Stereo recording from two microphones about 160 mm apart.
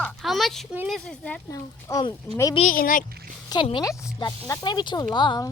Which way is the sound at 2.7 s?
55° left (ahead or behind).